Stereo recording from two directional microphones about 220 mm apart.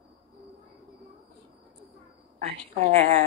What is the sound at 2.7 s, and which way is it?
Speech, 35° right (ahead or behind).